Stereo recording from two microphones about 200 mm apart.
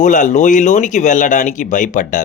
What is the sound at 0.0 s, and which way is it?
Speech, 40° left (ahead or behind).